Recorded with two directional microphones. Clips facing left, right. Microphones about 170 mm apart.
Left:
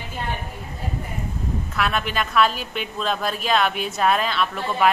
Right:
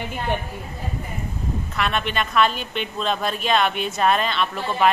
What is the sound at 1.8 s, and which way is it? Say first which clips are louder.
A woman's voice: even; centre (ahead or behind).